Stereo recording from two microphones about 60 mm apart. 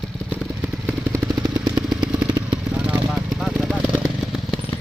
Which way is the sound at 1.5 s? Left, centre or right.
Right.